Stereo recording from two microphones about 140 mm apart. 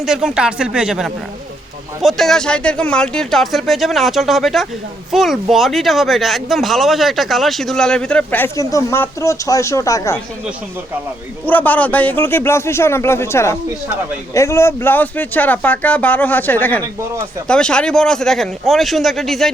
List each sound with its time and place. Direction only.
0.0 s speech: 5° right (ahead or behind); by 10.2 s 25° left (ahead or behind)
11.4 s a man's voice: 10° left (ahead or behind)